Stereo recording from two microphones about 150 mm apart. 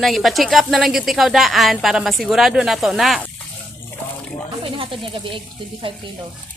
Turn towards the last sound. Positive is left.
turn(degrees=-35)  # may be behind; listen again after turning